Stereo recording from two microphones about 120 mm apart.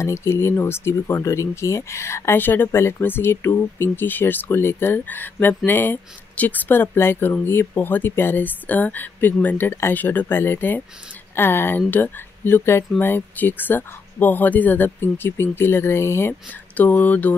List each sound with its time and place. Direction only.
0.0 s speech: 25° left (ahead or behind)